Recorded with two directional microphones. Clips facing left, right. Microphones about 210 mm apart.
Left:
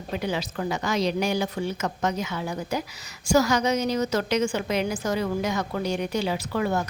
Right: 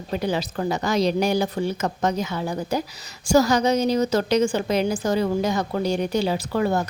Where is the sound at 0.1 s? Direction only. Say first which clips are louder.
Right 4 dB; 35° right (ahead or behind).